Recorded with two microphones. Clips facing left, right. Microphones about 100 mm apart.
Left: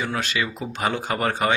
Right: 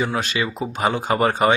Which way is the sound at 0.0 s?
20° right (ahead or behind).